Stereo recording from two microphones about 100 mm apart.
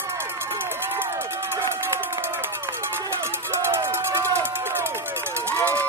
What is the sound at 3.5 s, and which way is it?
Run, 20° right (ahead or behind).